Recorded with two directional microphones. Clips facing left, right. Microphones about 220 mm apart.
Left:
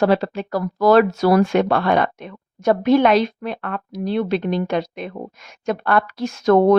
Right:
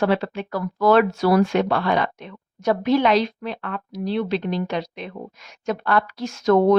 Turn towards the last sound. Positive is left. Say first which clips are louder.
# left 2 dB
turn(degrees=55)  # may be behind; listen again after turning